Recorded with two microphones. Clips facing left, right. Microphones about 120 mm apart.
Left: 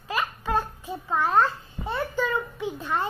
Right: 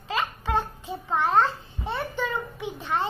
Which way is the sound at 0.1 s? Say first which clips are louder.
Even; 25° right (ahead or behind).